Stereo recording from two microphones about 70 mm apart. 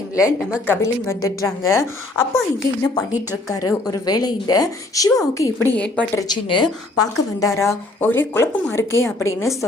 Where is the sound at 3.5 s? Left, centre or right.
Left.